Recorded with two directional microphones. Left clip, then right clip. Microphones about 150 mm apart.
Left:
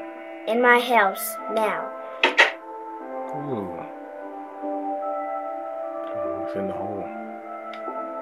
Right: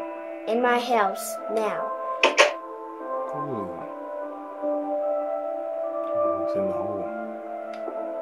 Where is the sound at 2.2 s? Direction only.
25° right (ahead or behind).